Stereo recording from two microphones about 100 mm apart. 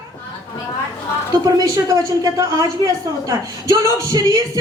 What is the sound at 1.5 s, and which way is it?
A woman's voice, 35° right (ahead or behind).